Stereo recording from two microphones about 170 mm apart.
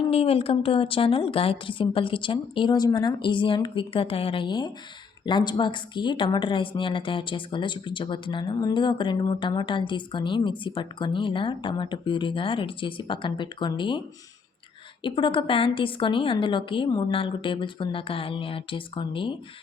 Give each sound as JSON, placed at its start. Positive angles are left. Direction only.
{"t": 0.1, "sound": "a woman's voice", "side_deg": 35}
{"t": 15.0, "sound": "a woman's voice", "side_deg": 30}